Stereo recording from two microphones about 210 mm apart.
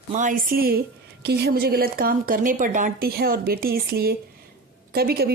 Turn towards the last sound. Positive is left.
turn(degrees=-45)  # may be behind; listen again after turning